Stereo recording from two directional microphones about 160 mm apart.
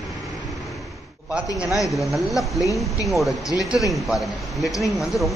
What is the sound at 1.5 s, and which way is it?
A man's voice, 5° right (ahead or behind).